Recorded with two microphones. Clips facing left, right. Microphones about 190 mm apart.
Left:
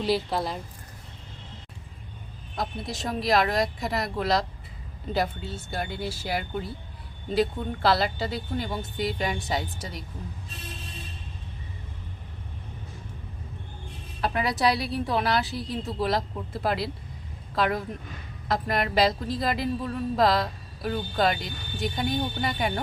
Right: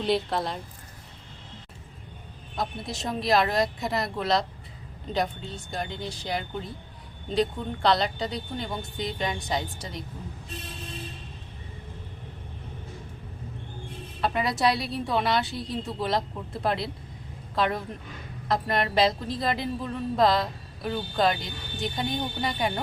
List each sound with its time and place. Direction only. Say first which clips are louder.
0.0 s a woman's voice: even; centre (ahead or behind)
2.6 s a woman's voice: even; centre (ahead or behind)
14.2 s a woman's voice: even; centre (ahead or behind)